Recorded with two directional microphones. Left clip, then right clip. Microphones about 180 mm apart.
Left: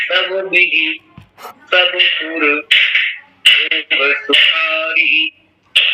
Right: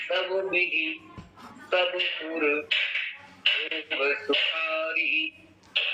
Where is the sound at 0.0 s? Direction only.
45° left (ahead or behind).